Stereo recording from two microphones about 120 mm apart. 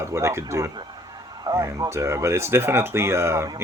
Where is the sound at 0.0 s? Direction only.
25° right (ahead or behind).